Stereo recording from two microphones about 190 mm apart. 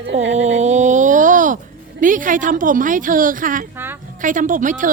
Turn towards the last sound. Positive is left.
turn(degrees=-45)  # may be behind; listen again after turning